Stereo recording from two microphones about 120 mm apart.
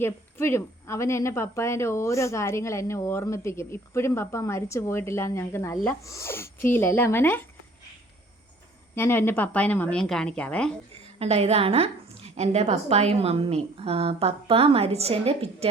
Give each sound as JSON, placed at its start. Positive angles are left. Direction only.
{"t": 0.0, "sound": "speech", "side_deg": 20}
{"t": 9.0, "sound": "a woman's voice", "side_deg": 20}
{"t": 11.2, "sound": "a woman's voice", "side_deg": -60}